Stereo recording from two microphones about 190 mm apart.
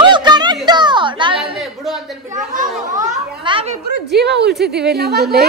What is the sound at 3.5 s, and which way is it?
Speech, 30° right (ahead or behind).